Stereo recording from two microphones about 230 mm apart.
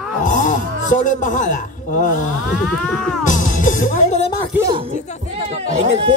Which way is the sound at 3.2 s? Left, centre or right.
Left.